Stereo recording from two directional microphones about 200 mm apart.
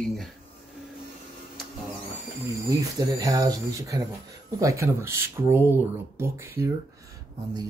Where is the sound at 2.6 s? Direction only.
15° right (ahead or behind).